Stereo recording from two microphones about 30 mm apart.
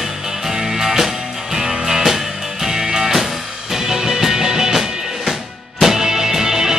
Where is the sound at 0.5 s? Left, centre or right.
Centre.